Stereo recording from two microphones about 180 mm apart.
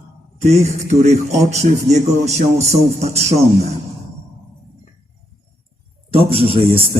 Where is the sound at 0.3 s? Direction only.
40° right (ahead or behind).